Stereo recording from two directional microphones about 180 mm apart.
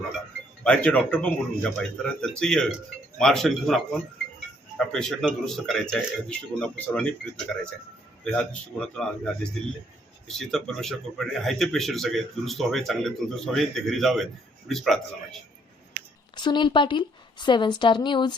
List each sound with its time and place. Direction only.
0.6 s speech: 5° left (ahead or behind)
4.9 s speech: 5° left (ahead or behind)
16.3 s speech: 25° left (ahead or behind)